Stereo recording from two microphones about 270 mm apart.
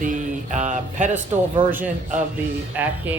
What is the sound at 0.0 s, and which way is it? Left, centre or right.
Music, right.